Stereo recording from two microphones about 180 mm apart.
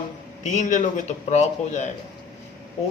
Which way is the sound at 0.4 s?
40° left (ahead or behind).